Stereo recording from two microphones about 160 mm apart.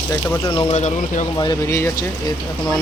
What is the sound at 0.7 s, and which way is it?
Speech, 50° left (ahead or behind).